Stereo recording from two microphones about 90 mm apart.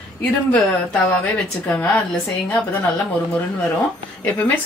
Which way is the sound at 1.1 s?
15° left (ahead or behind).